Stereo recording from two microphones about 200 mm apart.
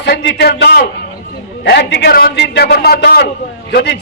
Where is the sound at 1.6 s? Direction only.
55° left (ahead or behind).